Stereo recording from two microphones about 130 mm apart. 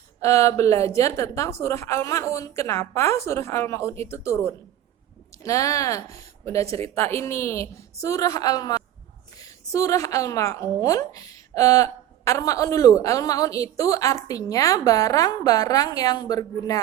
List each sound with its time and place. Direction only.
0.2 s a woman's voice: 25° left (ahead or behind)